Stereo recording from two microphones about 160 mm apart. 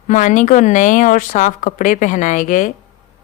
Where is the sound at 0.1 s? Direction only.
50° left (ahead or behind).